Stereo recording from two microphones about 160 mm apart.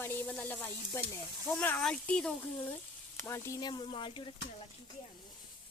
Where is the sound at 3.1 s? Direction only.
15° left (ahead or behind); by 4.3 s 30° left (ahead or behind).